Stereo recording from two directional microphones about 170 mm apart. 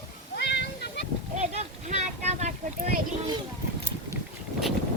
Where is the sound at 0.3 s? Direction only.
85° left.